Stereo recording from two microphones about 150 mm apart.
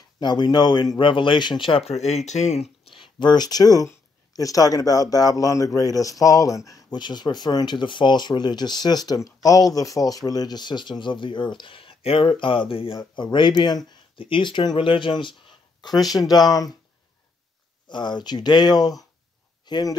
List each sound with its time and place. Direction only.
0.2 s speech: 30° left (ahead or behind); by 2.6 s 50° left (ahead or behind)
2.9 s speech: 35° left (ahead or behind)
17.8 s speech: 30° left (ahead or behind)